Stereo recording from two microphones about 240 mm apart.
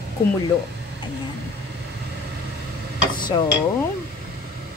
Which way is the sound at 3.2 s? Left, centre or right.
Centre.